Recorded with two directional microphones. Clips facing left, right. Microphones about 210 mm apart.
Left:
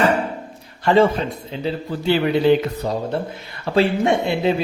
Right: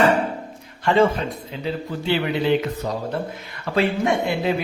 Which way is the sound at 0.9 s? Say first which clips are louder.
Left 2 dB; 40° left (ahead or behind).